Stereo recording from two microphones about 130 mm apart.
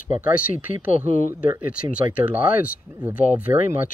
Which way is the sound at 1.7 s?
10° right (ahead or behind).